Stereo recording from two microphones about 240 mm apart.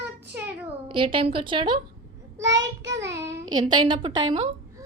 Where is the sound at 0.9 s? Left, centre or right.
Right.